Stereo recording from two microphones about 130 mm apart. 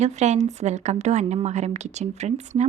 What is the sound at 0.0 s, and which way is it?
A woman's voice, 60° right (ahead or behind).